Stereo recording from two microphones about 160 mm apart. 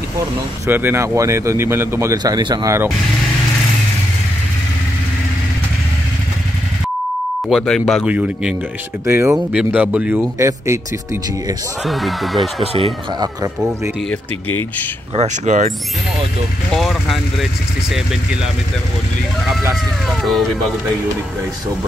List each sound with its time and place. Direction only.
0.7 s a man's voice: 15° right (ahead or behind)
7.4 s a man's voice: centre (ahead or behind)
9.0 s a man's voice: 15° right (ahead or behind)
11.8 s speech: centre (ahead or behind)
12.7 s speech: 35° right (ahead or behind)
13.6 s a man's voice: 5° right (ahead or behind)
15.1 s speech: 45° right (ahead or behind)
16.7 s speech: centre (ahead or behind)